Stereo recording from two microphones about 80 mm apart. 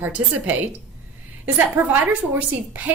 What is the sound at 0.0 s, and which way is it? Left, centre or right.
Speech, right.